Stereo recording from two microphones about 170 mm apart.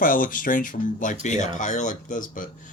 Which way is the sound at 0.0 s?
55° left (ahead or behind).